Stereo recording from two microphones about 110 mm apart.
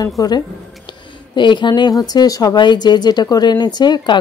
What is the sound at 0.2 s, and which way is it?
Speech, 35° left (ahead or behind).